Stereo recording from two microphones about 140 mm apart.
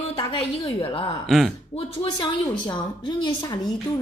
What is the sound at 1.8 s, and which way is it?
A woman's voice, 40° left (ahead or behind).